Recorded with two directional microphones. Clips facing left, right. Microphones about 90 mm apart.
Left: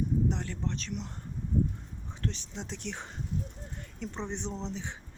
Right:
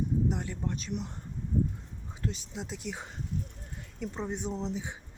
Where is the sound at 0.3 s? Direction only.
10° right (ahead or behind).